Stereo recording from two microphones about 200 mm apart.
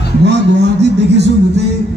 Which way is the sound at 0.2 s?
60° right (ahead or behind).